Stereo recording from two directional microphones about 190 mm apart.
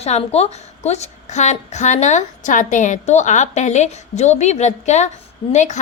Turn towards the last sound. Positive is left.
turn(degrees=40)  # may be behind; listen again after turning